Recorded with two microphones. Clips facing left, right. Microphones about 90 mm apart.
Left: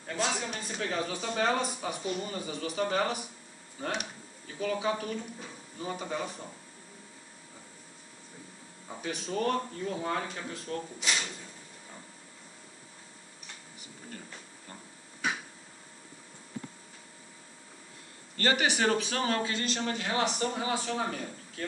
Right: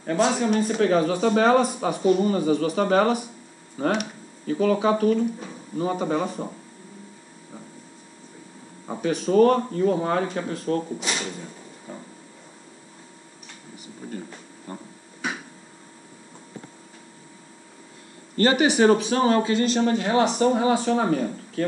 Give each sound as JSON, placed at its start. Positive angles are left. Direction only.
{"t": 0.0, "sound": "a man's voice", "side_deg": -55}
{"t": 9.1, "sound": "a man's voice", "side_deg": -55}
{"t": 11.0, "sound": "speech", "side_deg": -35}
{"t": 14.7, "sound": "speech", "side_deg": -25}
{"t": 18.4, "sound": "speech", "side_deg": -25}
{"t": 19.9, "sound": "speech", "side_deg": -35}